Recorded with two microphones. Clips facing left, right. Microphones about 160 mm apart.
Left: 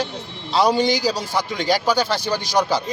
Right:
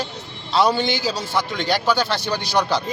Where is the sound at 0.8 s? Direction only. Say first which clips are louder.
Left 4 dB; 40° left (ahead or behind).